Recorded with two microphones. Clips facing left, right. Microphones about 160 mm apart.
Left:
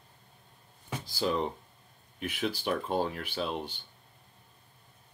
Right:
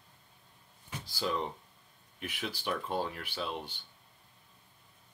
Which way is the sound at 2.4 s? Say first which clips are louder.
Left 5 dB; 45° left (ahead or behind).